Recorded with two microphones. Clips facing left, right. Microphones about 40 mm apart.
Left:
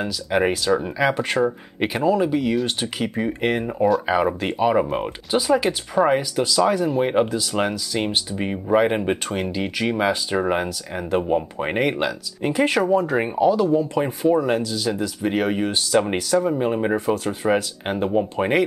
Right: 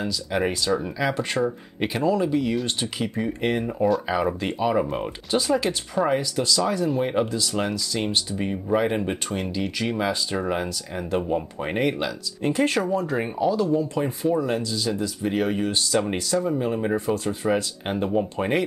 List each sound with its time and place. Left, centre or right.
0.0 s speech: centre
8.5 s speech: left
16.9 s speech: centre
17.3 s speech: left
17.6 s speech: centre